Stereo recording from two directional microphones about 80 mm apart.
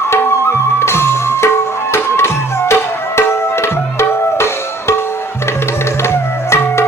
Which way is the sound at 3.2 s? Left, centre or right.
Left.